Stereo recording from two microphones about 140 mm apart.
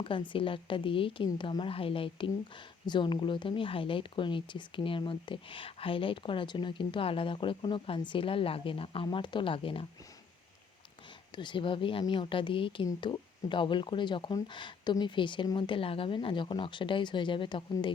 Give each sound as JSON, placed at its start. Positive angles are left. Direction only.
{"t": 0.0, "sound": "speech", "side_deg": 40}
{"t": 11.3, "sound": "speech", "side_deg": 35}